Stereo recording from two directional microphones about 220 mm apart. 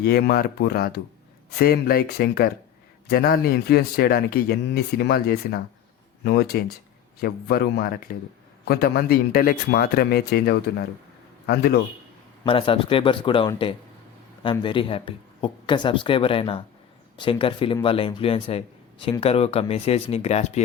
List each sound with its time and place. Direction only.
0.0 s speech: 45° left (ahead or behind)
12.5 s speech: 25° left (ahead or behind)